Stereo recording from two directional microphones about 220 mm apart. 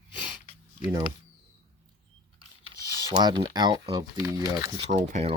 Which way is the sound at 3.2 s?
20° right (ahead or behind).